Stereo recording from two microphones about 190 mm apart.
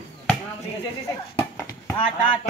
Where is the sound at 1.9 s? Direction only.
25° left (ahead or behind).